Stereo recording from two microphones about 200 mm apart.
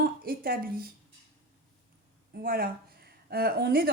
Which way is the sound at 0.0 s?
50° right (ahead or behind).